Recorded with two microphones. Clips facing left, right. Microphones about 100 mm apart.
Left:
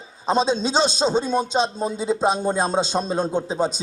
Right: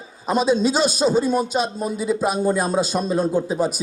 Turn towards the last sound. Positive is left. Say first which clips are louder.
# right 2 dB
turn(degrees=25)  # may be behind; listen again after turning